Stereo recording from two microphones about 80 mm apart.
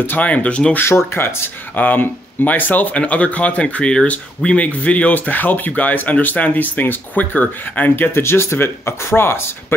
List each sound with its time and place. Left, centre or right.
0.0 s speech: left
0.7 s speech: left